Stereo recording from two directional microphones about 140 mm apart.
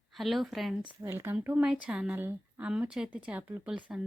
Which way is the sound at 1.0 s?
15° right (ahead or behind).